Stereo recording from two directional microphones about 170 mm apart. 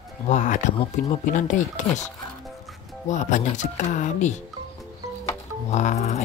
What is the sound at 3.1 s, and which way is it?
Speech, 45° left (ahead or behind).